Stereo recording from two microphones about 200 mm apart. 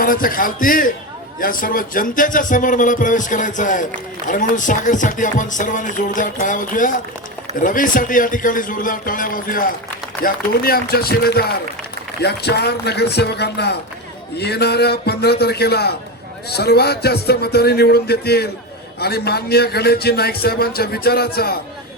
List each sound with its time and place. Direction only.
0.0 s a man's voice: 45° left (ahead or behind)